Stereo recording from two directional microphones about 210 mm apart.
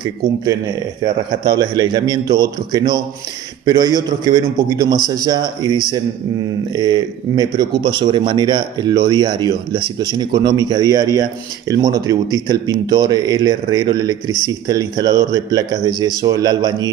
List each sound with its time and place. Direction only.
0.0 s a man's voice: 20° right (ahead or behind)